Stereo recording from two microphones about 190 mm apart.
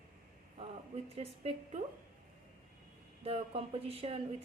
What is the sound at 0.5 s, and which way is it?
Speech, 30° right (ahead or behind).